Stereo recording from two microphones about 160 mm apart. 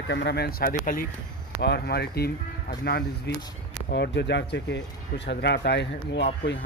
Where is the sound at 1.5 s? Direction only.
90° left.